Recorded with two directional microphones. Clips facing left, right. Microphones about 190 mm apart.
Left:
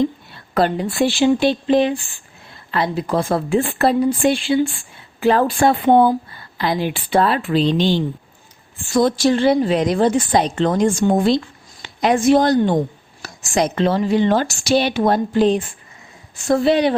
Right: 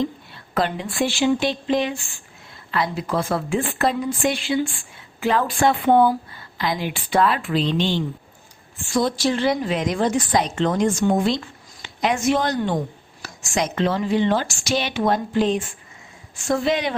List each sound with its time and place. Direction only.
0.5 s a woman's voice: 35° left (ahead or behind)
5.8 s a woman's voice: 25° left (ahead or behind); by 9.4 s 45° left (ahead or behind)
9.4 s a woman's voice: 30° left (ahead or behind)